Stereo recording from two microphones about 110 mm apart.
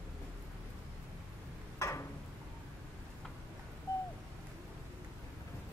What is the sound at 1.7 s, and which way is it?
Tick-tock, 30° left (ahead or behind).